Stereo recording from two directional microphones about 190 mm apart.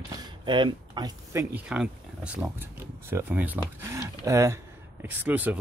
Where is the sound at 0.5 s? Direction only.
25° right (ahead or behind).